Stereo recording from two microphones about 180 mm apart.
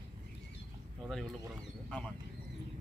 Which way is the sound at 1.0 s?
5° right (ahead or behind).